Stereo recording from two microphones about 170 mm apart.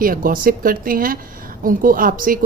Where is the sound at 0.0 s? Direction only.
55° right (ahead or behind).